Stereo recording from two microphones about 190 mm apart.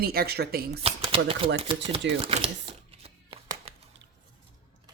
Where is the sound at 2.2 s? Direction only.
30° right (ahead or behind).